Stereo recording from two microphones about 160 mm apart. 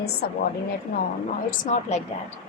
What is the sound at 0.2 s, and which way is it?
Speech, 75° left (ahead or behind).